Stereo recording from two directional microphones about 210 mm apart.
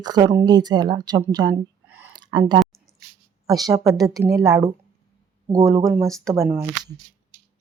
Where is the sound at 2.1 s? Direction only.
20° right (ahead or behind).